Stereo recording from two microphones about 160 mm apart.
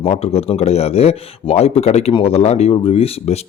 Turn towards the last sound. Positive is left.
turn(degrees=40)  # may be behind; listen again after turning